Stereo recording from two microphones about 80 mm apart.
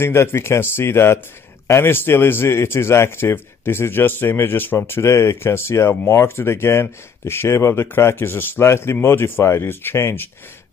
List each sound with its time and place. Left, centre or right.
0.0 s a man's voice: left